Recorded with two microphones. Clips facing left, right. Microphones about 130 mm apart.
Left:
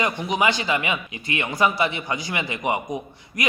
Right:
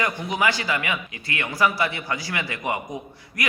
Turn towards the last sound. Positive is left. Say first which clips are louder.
# left 3 dB
turn(degrees=20)  # may be behind; listen again after turning